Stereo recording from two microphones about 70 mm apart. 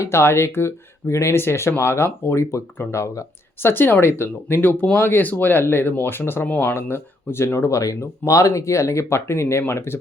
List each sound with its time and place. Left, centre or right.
0.0 s speech: left